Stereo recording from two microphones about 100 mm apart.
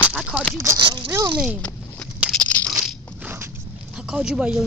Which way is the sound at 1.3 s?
10° right (ahead or behind).